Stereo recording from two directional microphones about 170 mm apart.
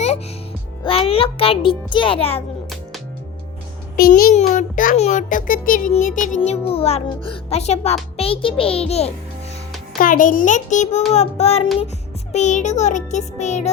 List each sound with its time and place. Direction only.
0.9 s a child's voice: 35° left (ahead or behind)
3.9 s a child's voice: 60° left (ahead or behind)
4.4 s a child's voice: 50° left (ahead or behind)
10.0 s a child's voice: 50° left (ahead or behind)